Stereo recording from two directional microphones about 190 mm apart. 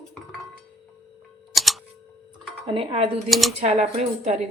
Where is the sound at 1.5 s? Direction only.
Centre (ahead or behind).